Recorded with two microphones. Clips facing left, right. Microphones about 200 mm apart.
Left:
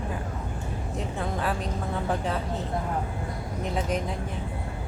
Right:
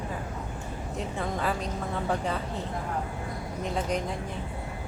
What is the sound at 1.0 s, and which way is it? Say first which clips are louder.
Speech: even; centre (ahead or behind).